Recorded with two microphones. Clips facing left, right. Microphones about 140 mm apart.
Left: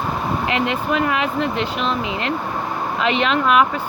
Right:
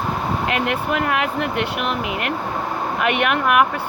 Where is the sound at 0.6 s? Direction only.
65° right (ahead or behind).